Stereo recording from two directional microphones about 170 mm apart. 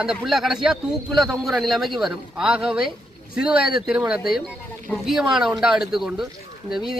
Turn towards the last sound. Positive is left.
turn(degrees=0)  # may be behind; listen again after turning